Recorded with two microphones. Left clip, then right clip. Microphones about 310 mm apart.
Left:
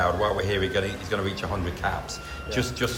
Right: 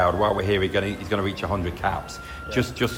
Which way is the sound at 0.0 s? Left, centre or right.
Right.